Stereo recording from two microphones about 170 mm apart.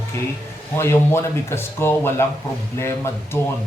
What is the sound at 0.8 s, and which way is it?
Speech, 15° left (ahead or behind).